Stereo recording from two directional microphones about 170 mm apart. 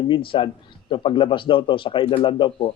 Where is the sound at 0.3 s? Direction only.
30° left (ahead or behind).